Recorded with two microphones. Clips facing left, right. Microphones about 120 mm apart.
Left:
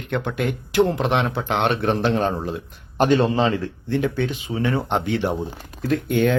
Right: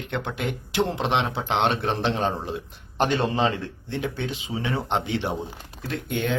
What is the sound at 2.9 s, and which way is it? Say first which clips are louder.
Speech: left 6 dB; 40° left (ahead or behind).